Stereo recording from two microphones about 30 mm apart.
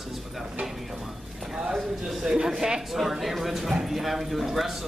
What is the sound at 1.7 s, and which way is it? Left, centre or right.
Speech, centre.